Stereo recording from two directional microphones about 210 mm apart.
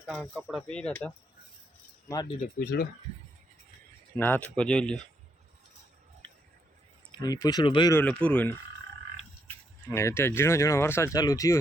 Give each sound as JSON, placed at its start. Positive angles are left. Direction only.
{"t": 0.3, "sound": "speech", "side_deg": -5}
{"t": 0.7, "sound": "speech", "side_deg": 5}
{"t": 2.0, "sound": "speech", "side_deg": 20}
{"t": 2.6, "sound": "speech", "side_deg": 45}
{"t": 4.2, "sound": "speech", "side_deg": 5}
{"t": 7.1, "sound": "speech", "side_deg": 20}
{"t": 7.9, "sound": "speech", "side_deg": 5}
{"t": 9.9, "sound": "speech", "side_deg": 15}